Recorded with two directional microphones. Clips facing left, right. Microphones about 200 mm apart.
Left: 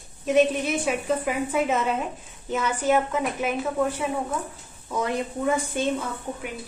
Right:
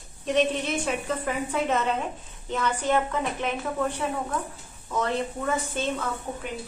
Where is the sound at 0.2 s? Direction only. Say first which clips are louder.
Left 4 dB; 10° left (ahead or behind).